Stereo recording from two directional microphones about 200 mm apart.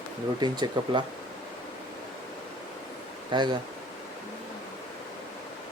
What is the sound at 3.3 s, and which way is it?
Speech, 25° right (ahead or behind).